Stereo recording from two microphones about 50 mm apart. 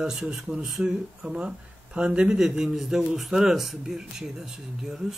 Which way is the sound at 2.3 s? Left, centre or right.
Centre.